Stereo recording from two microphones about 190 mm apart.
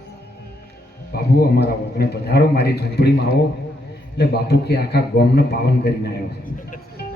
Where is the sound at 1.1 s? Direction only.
55° left (ahead or behind).